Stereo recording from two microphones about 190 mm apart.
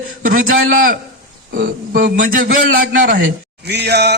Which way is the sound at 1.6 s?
50° right (ahead or behind).